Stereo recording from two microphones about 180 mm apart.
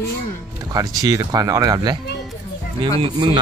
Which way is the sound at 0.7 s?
20° right (ahead or behind).